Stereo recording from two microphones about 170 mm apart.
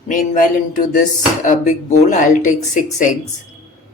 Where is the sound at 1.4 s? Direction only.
45° left (ahead or behind).